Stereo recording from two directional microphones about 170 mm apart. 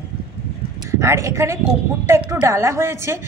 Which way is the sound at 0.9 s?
15° right (ahead or behind).